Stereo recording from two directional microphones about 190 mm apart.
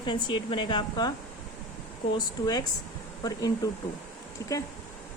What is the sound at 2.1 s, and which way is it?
A woman's voice, 20° left (ahead or behind).